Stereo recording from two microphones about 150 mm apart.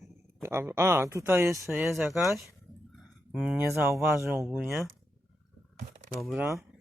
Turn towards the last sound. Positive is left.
turn(degrees=0)  # may be behind; listen again after turning